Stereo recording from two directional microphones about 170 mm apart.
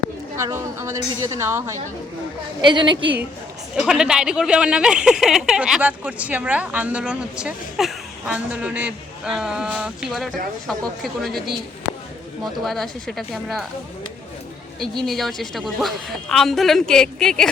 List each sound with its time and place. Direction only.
0.3 s a woman's voice: 15° right (ahead or behind)
2.6 s a woman's voice: 25° right (ahead or behind)
3.8 s speech: 5° right (ahead or behind)
12.5 s speech: centre (ahead or behind)
15.0 s speech: centre (ahead or behind)